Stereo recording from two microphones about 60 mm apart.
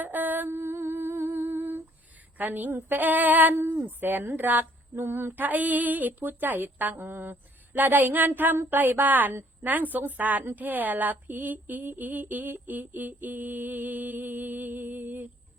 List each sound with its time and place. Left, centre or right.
0.0 s humming: right
0.5 s humming: right
2.4 s speech: right
5.4 s speech: right